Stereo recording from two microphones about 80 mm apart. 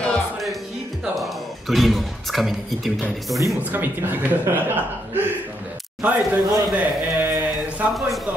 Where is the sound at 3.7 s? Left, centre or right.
Right.